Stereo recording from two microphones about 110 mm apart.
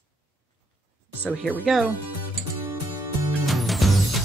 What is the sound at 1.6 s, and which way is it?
Speech, 5° right (ahead or behind).